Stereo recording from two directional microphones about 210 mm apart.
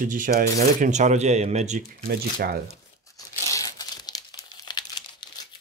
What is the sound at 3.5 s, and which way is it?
Crumpling, 15° left (ahead or behind).